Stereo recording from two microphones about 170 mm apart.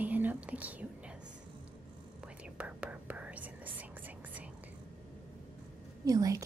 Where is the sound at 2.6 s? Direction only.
10° right (ahead or behind).